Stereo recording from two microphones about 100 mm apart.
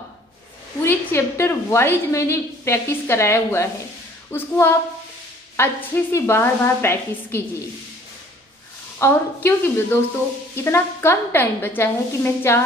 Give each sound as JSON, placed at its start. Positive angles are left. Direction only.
{"t": 0.8, "sound": "a woman's voice", "side_deg": 25}
{"t": 9.0, "sound": "a woman's voice", "side_deg": 20}